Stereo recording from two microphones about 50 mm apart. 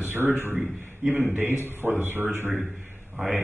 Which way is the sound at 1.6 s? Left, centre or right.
Right.